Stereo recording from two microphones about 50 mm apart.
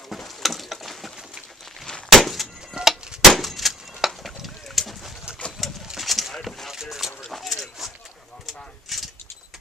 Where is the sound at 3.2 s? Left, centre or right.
Centre.